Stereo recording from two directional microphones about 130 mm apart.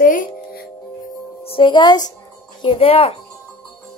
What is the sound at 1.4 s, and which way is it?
Speech, 40° left (ahead or behind).